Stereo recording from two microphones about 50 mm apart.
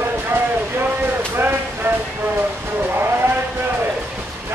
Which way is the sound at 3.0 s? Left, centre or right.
Right.